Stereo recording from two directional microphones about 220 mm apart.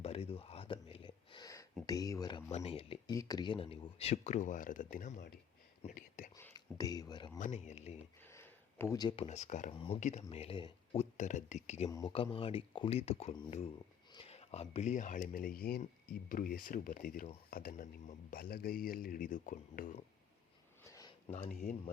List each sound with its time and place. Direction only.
0.0 s a sound: 25° left (ahead or behind)
1.9 s speech: 15° left (ahead or behind)
2.5 s speech: 30° left (ahead or behind)
5.8 s whispering: 35° left (ahead or behind)
6.3 s a sound: 15° left (ahead or behind)
7.3 s speech: 35° left (ahead or behind)
8.2 s a sound: 10° left (ahead or behind)
9.2 s speech: 30° left (ahead or behind)
11.2 s speech: 35° left (ahead or behind)
11.9 s speech: 15° left (ahead or behind)
12.1 s speech: 25° left (ahead or behind)
20.8 s a sound: 15° left (ahead or behind)
21.3 s speech: 40° left (ahead or behind)